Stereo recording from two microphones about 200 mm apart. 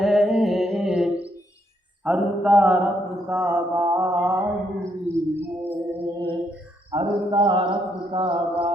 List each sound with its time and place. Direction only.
0.0 s mantra: centre (ahead or behind)
6.9 s mantra: 25° right (ahead or behind)